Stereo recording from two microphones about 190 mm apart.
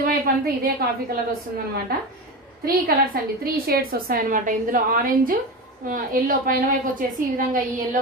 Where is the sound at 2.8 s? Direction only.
55° right (ahead or behind).